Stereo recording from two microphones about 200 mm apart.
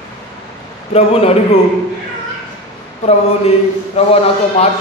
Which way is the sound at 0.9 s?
30° left (ahead or behind).